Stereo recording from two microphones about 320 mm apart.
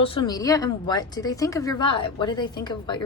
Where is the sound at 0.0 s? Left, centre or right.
Centre.